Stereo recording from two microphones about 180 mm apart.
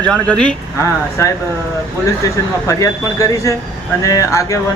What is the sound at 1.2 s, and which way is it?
Speech, 15° left (ahead or behind).